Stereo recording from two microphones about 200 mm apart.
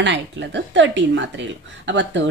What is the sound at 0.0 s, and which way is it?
Speech, 60° right (ahead or behind).